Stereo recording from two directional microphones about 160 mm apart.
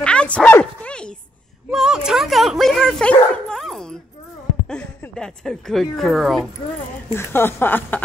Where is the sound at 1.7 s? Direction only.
5° right (ahead or behind).